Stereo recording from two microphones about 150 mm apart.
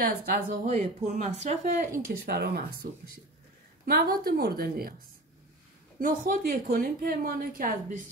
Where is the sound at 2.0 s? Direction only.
90° right.